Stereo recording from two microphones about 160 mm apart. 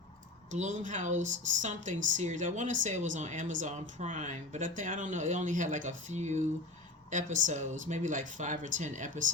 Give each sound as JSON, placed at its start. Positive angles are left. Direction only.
{"t": 0.5, "sound": "speech", "side_deg": -50}